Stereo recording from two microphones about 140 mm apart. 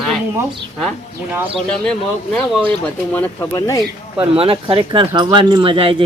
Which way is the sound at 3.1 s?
15° left (ahead or behind).